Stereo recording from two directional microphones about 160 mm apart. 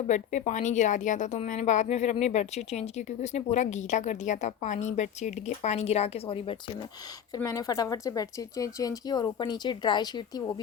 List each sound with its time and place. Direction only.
0.1 s a woman's voice: 50° left (ahead or behind); by 6.6 s 35° left (ahead or behind)
7.3 s speech: 20° left (ahead or behind)